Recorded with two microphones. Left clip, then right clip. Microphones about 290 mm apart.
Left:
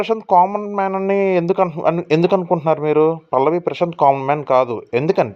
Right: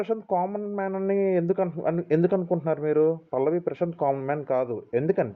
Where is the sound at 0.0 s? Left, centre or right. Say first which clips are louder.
Left 12 dB; left.